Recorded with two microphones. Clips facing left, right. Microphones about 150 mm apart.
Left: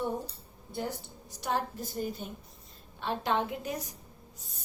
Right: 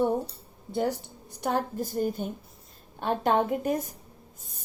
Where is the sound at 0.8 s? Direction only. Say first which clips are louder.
Right 8 dB; 60° right (ahead or behind).